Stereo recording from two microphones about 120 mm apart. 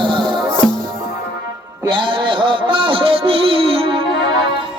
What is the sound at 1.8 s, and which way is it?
Music, 40° right (ahead or behind).